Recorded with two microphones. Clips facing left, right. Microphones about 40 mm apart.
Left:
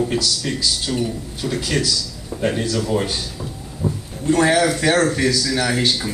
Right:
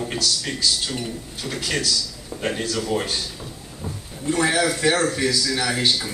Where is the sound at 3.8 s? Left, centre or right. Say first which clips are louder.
Left 10 dB; centre.